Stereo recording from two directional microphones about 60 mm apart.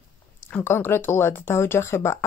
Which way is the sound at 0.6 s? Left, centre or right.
Left.